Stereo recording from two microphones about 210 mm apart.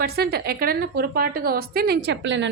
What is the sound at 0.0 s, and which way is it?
A woman's voice, 50° right (ahead or behind).